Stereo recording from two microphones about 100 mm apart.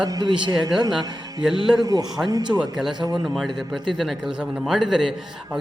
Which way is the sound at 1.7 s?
40° right (ahead or behind).